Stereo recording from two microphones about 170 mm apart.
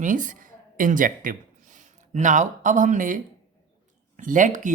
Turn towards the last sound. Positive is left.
turn(degrees=-50)  # may be behind; listen again after turning